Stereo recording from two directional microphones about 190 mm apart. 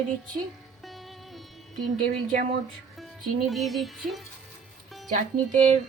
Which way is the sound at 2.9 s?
Centre (ahead or behind).